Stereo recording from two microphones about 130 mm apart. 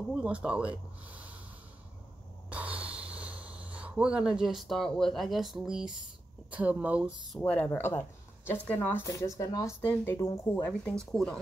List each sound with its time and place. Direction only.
0.1 s speech: 10° right (ahead or behind)
2.5 s speech: 10° right (ahead or behind)
7.3 s speech: 10° left (ahead or behind)